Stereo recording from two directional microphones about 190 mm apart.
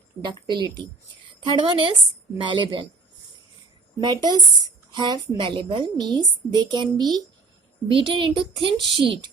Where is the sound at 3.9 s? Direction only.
20° right (ahead or behind).